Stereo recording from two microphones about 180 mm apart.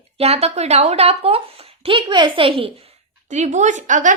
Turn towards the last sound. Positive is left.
turn(degrees=-45)  # may be behind; listen again after turning